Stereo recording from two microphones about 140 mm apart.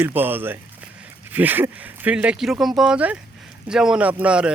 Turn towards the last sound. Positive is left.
turn(degrees=-10)  # may be behind; listen again after turning